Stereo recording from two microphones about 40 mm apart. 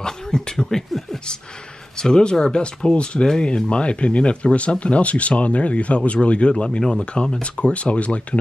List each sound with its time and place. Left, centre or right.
0.0 s a sound: centre
0.7 s speech: centre
2.0 s speech: centre